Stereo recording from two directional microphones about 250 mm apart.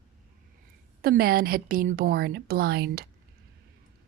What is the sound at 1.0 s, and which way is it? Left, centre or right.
Speech, right.